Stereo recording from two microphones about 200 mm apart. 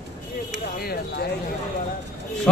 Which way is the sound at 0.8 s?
50° left (ahead or behind).